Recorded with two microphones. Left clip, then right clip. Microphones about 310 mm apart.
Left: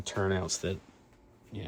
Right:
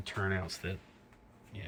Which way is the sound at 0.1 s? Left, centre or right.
Centre.